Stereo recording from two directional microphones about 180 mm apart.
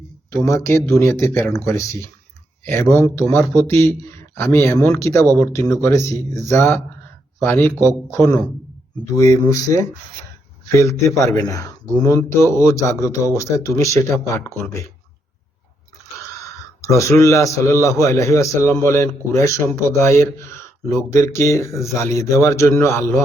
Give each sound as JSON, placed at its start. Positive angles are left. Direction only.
{"t": 0.3, "sound": "a man's voice", "side_deg": 15}
{"t": 16.8, "sound": "a man's voice", "side_deg": 15}